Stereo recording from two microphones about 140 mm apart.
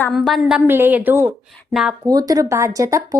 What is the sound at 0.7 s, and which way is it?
A woman's voice, 15° right (ahead or behind).